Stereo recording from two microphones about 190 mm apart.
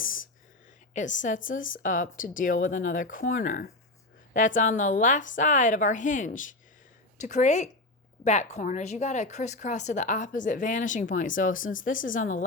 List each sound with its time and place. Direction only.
0.9 s a woman's voice: 40° left (ahead or behind)